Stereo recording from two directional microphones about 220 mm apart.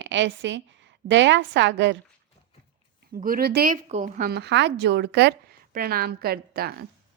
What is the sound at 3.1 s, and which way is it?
Speech, 40° right (ahead or behind).